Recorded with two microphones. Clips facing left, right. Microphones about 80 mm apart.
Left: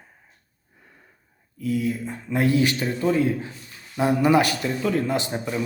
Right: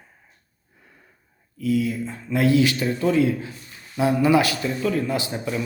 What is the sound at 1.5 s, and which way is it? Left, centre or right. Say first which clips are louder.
Speech: right 2 dB; left.